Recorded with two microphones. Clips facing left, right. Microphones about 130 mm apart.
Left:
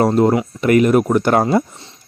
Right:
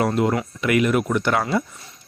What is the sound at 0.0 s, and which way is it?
Speech, 35° left (ahead or behind).